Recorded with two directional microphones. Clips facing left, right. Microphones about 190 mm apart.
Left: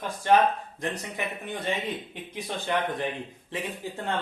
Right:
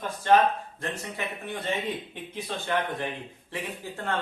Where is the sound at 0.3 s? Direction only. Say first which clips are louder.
Even; 15° left (ahead or behind).